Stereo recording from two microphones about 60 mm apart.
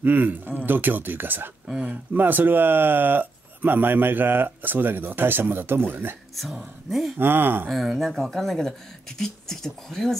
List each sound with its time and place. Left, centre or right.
0.0 s speech: right
1.7 s speech: centre
2.1 s speech: right
6.9 s speech: centre
7.2 s speech: right
7.7 s speech: centre